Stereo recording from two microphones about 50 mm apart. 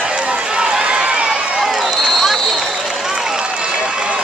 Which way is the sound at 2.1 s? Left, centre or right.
Centre.